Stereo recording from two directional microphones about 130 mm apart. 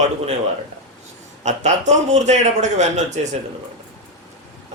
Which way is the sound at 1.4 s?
60° right (ahead or behind).